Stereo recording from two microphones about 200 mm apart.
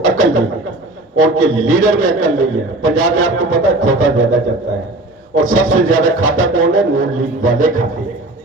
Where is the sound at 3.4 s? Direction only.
90° right.